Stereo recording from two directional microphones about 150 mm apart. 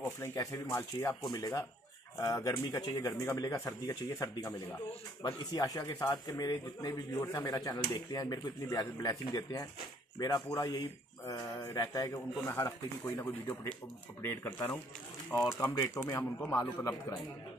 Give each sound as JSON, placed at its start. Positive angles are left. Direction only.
{"t": 0.2, "sound": "speech", "side_deg": 20}